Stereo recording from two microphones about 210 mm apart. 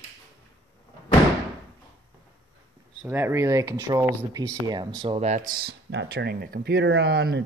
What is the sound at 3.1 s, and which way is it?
Speech, 10° right (ahead or behind).